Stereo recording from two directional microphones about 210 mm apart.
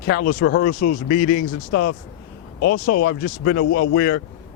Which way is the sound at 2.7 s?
45° left (ahead or behind).